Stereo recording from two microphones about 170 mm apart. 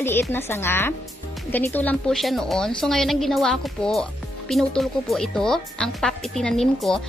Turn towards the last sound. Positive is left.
turn(degrees=0)  # may be behind; listen again after turning